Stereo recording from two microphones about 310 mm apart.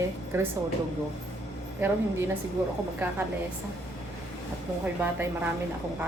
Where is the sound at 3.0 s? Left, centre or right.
Centre.